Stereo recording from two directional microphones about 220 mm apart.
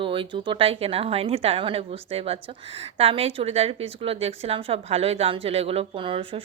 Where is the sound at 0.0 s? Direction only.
25° right (ahead or behind).